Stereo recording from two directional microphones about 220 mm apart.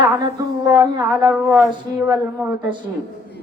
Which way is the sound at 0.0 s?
15° right (ahead or behind).